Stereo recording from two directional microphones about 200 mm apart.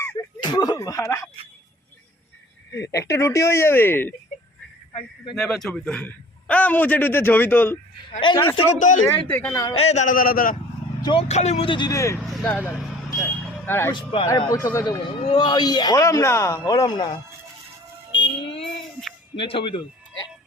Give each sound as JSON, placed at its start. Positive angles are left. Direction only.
{"t": 0.0, "sound": "a sound", "side_deg": 15}
{"t": 3.0, "sound": "a man's voice", "side_deg": 15}
{"t": 5.3, "sound": "a man's voice", "side_deg": 0}
{"t": 8.2, "sound": "a man's voice", "side_deg": 25}
{"t": 8.7, "sound": "a man's voice", "side_deg": 40}
{"t": 9.3, "sound": "a man's voice", "side_deg": 15}
{"t": 9.7, "sound": "a man's voice", "side_deg": 30}
{"t": 11.0, "sound": "a man's voice", "side_deg": 30}
{"t": 12.2, "sound": "speech", "side_deg": 0}
{"t": 13.1, "sound": "vehicle", "side_deg": 15}
{"t": 13.9, "sound": "a man's voice", "side_deg": 25}
{"t": 18.6, "sound": "a sound", "side_deg": 5}
{"t": 19.4, "sound": "speech", "side_deg": 25}